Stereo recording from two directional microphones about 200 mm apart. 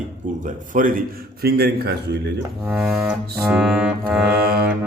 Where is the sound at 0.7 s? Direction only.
40° right (ahead or behind).